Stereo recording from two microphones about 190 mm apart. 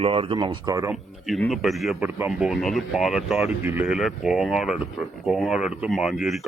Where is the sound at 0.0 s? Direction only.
30° right (ahead or behind).